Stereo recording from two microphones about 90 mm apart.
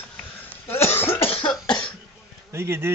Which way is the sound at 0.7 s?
25° left (ahead or behind).